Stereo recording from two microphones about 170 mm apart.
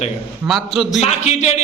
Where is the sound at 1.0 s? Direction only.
40° left (ahead or behind).